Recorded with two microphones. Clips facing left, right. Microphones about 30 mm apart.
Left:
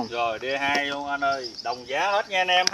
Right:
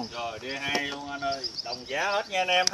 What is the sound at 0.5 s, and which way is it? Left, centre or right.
Speech, centre.